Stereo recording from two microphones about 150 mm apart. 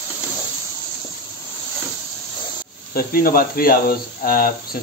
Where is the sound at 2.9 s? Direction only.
75° left (ahead or behind).